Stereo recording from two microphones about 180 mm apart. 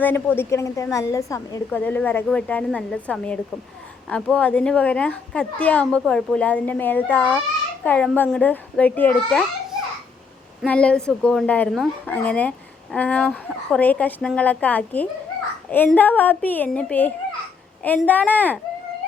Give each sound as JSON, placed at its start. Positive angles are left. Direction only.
{"t": 0.0, "sound": "speech", "side_deg": 10}
{"t": 10.6, "sound": "speech", "side_deg": 5}